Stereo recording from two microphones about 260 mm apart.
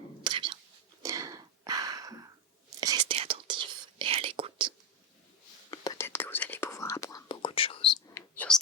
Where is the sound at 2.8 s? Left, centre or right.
Centre.